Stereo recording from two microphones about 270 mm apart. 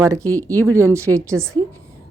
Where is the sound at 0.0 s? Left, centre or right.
Centre.